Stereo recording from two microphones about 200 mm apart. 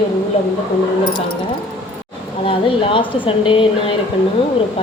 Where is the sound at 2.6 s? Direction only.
25° left (ahead or behind).